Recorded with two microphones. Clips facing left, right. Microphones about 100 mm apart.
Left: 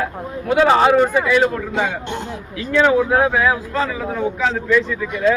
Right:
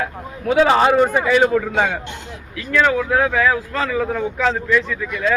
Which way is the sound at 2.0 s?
30° left (ahead or behind).